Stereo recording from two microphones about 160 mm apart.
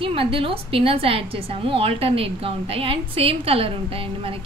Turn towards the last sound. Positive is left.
turn(degrees=-35)  # may be behind; listen again after turning